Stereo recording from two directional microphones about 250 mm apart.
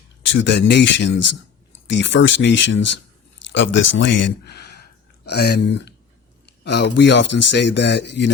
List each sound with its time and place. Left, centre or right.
0.3 s speech: left